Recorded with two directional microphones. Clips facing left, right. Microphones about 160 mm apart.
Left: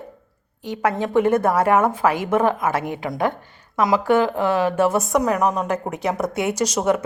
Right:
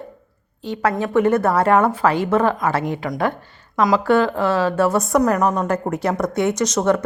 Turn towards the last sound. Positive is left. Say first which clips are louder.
# right 2 dB
turn(degrees=10)  # may be behind; listen again after turning